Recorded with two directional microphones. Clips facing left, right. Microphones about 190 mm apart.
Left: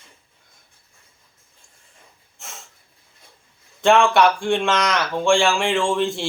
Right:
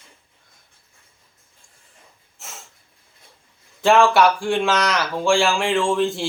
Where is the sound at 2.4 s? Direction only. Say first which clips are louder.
Even; 5° right (ahead or behind).